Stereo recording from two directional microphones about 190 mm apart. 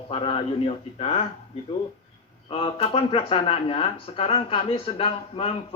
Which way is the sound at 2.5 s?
30° left (ahead or behind).